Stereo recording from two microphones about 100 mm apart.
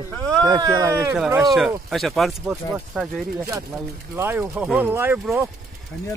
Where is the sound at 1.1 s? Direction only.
5° right (ahead or behind).